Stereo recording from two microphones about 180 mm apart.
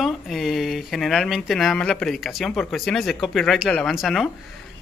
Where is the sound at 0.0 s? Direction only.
Centre (ahead or behind).